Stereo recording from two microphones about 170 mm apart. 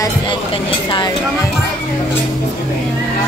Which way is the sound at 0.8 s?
25° left (ahead or behind).